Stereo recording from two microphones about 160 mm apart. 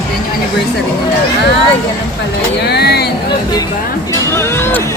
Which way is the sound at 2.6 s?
90° left.